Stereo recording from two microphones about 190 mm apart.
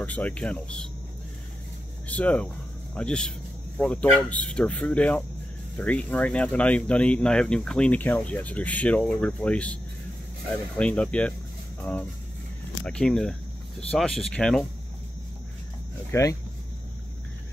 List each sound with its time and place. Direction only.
0.0 s speech: 10° left (ahead or behind)
2.0 s speech: 5° left (ahead or behind)
10.8 s speech: 5° left (ahead or behind)
16.1 s speech: 15° left (ahead or behind)